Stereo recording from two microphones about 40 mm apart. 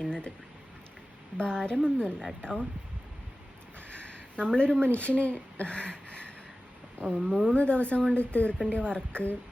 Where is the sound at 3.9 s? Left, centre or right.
Left.